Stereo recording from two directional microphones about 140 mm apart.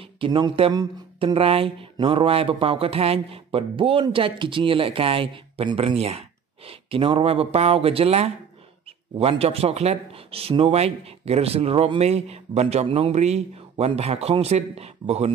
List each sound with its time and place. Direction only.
0.0 s speech: 35° right (ahead or behind)